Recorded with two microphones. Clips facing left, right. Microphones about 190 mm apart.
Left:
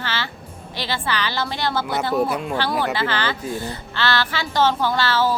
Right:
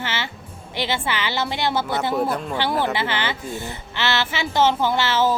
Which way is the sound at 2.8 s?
20° right (ahead or behind).